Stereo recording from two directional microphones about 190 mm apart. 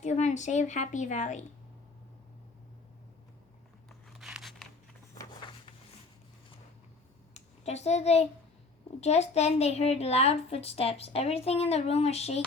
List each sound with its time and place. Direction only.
0.0 s a woman's voice: 40° left (ahead or behind)
3.8 s crunch: 5° right (ahead or behind)
7.3 s a woman's voice: 35° left (ahead or behind)